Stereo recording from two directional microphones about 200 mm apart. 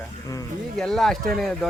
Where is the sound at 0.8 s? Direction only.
Centre (ahead or behind).